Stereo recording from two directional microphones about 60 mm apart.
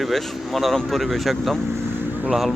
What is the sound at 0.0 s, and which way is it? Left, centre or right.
Speech, centre.